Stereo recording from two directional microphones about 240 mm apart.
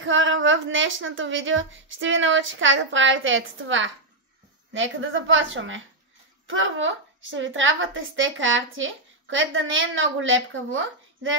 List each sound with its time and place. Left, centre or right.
0.0 s speech: right